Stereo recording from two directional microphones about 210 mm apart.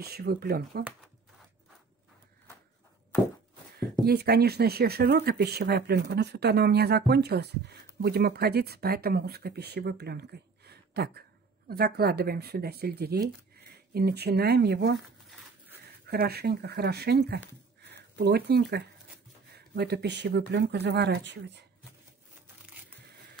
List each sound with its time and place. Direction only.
0.0 s speech: 45° right (ahead or behind)
4.0 s speech: 50° right (ahead or behind)
16.1 s speech: 50° right (ahead or behind)